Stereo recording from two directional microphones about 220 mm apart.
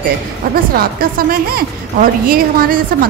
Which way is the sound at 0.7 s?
40° right (ahead or behind).